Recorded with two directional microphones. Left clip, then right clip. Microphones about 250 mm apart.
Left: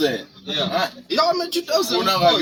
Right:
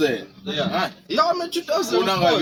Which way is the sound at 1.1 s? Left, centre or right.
Centre.